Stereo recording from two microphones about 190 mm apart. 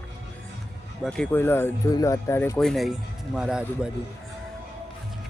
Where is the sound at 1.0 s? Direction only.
5° left (ahead or behind).